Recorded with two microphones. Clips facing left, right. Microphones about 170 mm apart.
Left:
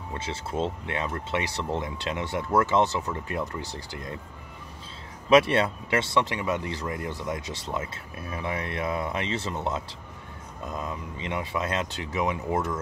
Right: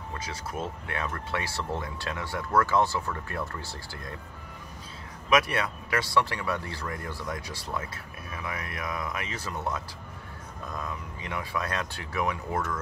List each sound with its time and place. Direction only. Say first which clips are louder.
0.1 s speech: left 5 dB; 25° left (ahead or behind)
5.3 s speech: left 6 dB; 25° left (ahead or behind)